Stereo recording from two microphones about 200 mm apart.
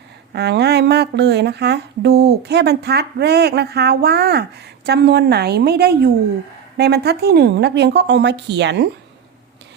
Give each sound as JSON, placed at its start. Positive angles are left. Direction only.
{"t": 0.3, "sound": "speech", "side_deg": -55}